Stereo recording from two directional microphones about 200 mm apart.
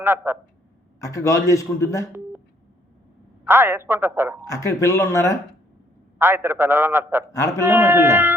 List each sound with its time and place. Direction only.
0.0 s a man's voice: 10° right (ahead or behind)
1.0 s a man's voice: 15° left (ahead or behind)
3.4 s a man's voice: 10° right (ahead or behind)
4.4 s a man's voice: 15° left (ahead or behind)
6.1 s a man's voice: 10° right (ahead or behind)
7.3 s a man's voice: 15° left (ahead or behind)
7.6 s a man's voice: 10° right (ahead or behind)